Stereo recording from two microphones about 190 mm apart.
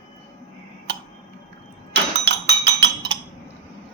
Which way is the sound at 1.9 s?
65° right (ahead or behind).